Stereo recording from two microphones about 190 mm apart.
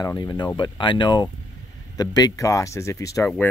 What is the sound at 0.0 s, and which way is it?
Speech, 20° left (ahead or behind).